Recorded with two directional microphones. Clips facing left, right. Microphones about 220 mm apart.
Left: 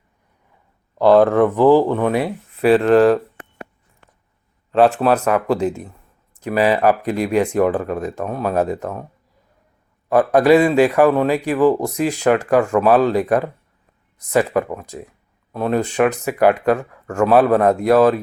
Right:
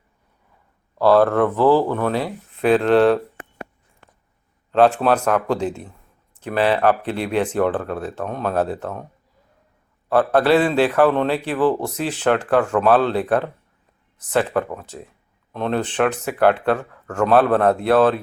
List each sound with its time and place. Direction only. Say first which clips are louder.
0.9 s a man's voice: left 3 dB; 20° left (ahead or behind)
2.6 s speech: left 3 dB; 5° left (ahead or behind)
4.9 s a man's voice: left 2 dB; 5° left (ahead or behind)
10.1 s a man's voice: left 3 dB; 10° left (ahead or behind)